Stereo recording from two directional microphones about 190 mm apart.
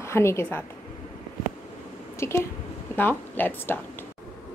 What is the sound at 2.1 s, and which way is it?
Speech, 15° left (ahead or behind).